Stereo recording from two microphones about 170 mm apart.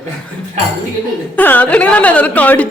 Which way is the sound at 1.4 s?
10° left (ahead or behind).